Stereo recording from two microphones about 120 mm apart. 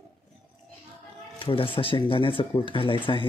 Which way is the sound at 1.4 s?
50° left (ahead or behind).